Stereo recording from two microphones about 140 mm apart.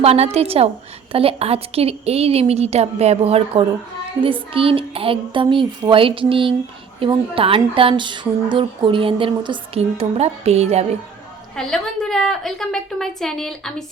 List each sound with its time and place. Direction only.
0.0 s speech: 45° right (ahead or behind)
11.5 s a woman's voice: 5° left (ahead or behind)